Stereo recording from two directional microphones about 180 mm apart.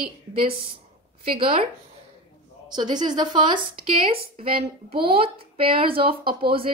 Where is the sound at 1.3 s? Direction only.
30° right (ahead or behind).